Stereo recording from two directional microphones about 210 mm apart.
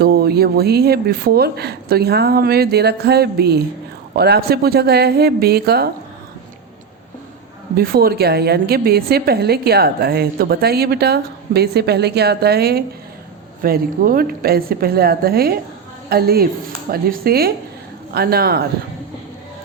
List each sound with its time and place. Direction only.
0.0 s a woman's voice: 50° right (ahead or behind)
7.8 s a woman's voice: 45° right (ahead or behind)